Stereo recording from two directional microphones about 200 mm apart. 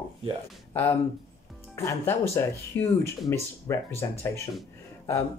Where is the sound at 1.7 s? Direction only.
15° left (ahead or behind).